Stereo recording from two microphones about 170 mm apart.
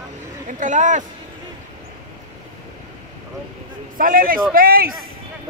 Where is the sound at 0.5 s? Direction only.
50° right (ahead or behind).